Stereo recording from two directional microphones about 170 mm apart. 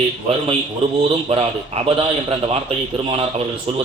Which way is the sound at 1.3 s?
35° right (ahead or behind).